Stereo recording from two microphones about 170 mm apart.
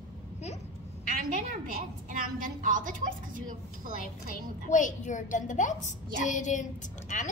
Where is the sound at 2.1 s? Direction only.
55° right (ahead or behind).